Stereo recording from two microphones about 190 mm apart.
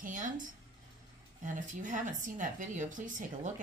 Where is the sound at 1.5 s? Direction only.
40° right (ahead or behind).